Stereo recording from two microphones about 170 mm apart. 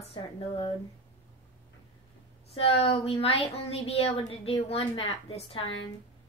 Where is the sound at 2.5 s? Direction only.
35° left (ahead or behind).